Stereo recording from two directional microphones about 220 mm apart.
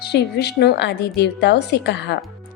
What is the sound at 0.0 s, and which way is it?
A woman's voice, 45° left (ahead or behind).